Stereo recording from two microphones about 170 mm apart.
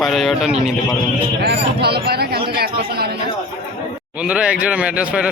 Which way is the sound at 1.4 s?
70° right (ahead or behind).